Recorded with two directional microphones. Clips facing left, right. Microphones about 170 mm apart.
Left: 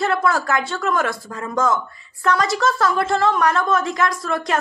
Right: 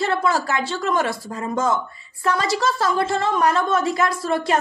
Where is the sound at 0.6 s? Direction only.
30° right (ahead or behind).